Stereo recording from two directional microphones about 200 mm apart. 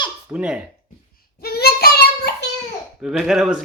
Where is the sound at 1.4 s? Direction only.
50° left (ahead or behind).